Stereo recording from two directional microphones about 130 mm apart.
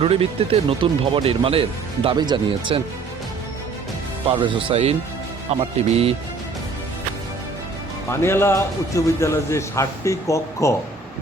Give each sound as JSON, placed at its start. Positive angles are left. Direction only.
{"t": 0.0, "sound": "speech", "side_deg": -50}
{"t": 2.0, "sound": "speech", "side_deg": -35}
{"t": 4.3, "sound": "speech", "side_deg": -40}
{"t": 8.1, "sound": "a man's voice", "side_deg": 20}